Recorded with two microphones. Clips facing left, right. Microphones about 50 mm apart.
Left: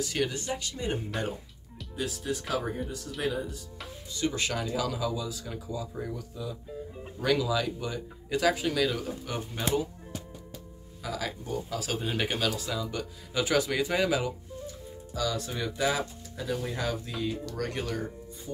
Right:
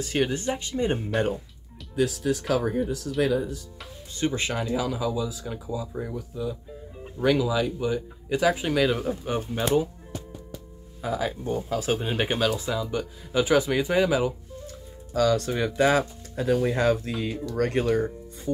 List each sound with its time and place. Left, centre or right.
0.0 s speech: right
2.0 s speech: right
4.3 s speech: right
8.9 s speech: right
11.0 s speech: right; by 14.3 s centre
15.1 s speech: right